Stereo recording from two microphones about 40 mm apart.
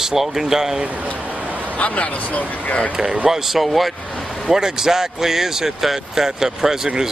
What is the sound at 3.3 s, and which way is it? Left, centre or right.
Speech, centre.